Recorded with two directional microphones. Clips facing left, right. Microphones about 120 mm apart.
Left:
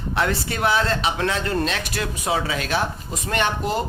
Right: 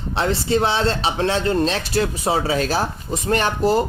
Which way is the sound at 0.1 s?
25° right (ahead or behind).